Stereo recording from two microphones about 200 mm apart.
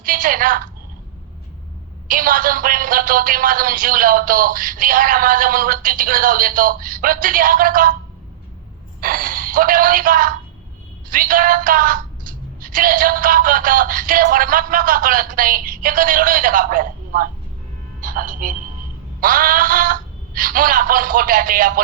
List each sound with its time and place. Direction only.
0.0 s a woman's voice: 45° right (ahead or behind)
2.0 s speech: 45° right (ahead or behind)
9.0 s a woman's voice: 45° right (ahead or behind)